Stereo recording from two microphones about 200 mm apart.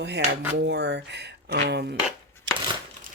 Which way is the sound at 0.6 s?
60° right (ahead or behind).